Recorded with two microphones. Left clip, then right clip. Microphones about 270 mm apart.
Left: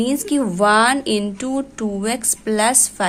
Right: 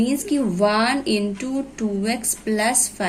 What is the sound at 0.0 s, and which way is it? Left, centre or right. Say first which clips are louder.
Speech: left 2 dB; left.